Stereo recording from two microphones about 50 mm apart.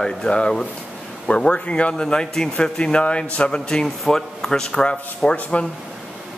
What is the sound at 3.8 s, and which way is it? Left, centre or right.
Speech, centre.